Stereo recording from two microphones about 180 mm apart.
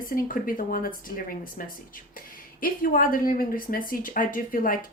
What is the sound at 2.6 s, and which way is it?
A woman's voice, 50° left (ahead or behind).